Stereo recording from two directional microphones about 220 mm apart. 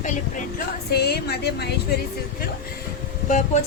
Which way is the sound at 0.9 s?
45° left (ahead or behind).